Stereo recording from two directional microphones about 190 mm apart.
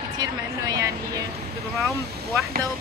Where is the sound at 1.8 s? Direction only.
Centre (ahead or behind).